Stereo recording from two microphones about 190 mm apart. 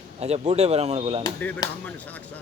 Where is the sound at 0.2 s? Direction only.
35° right (ahead or behind).